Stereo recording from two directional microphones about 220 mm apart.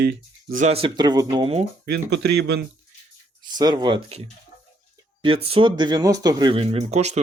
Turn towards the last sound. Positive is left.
turn(degrees=-30)  # may be behind; listen again after turning